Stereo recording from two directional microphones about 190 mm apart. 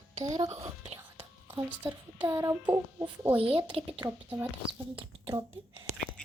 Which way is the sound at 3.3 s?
30° right (ahead or behind).